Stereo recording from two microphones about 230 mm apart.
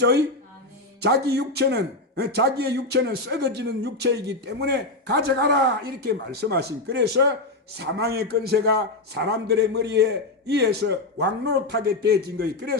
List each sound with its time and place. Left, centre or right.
1.0 s speech: right